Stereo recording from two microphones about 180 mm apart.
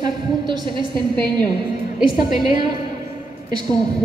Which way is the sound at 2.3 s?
25° right (ahead or behind).